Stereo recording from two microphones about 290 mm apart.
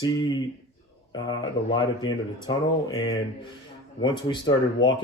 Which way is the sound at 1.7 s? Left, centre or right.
Centre.